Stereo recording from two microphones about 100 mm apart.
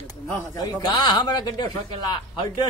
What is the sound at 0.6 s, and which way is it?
Speech, 45° left (ahead or behind).